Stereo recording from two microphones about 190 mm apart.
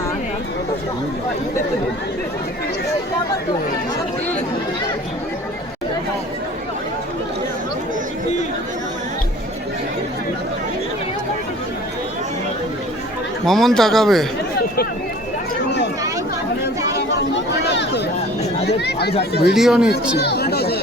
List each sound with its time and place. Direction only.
13.4 s a man's voice: centre (ahead or behind)
17.3 s a sound: 65° left (ahead or behind)
19.3 s speech: 60° left (ahead or behind)
19.5 s a man's voice: centre (ahead or behind)
20.1 s chatter: 60° left (ahead or behind)